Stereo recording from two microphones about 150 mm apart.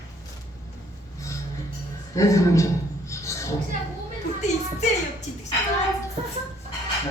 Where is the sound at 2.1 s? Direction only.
20° left (ahead or behind).